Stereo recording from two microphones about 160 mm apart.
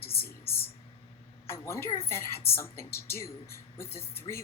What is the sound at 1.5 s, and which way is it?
A woman's voice, 15° left (ahead or behind).